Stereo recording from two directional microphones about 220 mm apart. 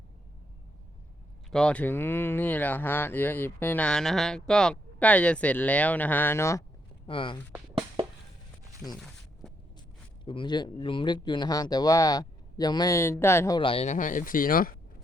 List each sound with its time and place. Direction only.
1.5 s speech: 5° left (ahead or behind); by 7.3 s 25° left (ahead or behind)
7.5 s music: 15° right (ahead or behind)
8.8 s speech: centre (ahead or behind)
10.2 s speech: 20° left (ahead or behind)
13.6 s speech: 25° left (ahead or behind)